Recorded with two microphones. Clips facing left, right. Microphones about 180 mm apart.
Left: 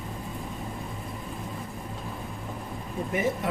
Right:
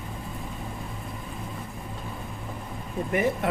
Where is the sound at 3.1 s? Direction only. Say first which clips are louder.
Right 3 dB; 60° right (ahead or behind).